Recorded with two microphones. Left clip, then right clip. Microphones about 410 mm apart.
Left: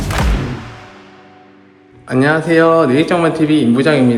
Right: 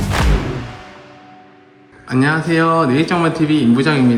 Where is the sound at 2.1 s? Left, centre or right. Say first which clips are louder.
Left 4 dB; centre.